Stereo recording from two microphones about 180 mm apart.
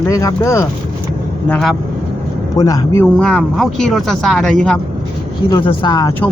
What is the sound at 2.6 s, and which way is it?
Speech, 20° left (ahead or behind).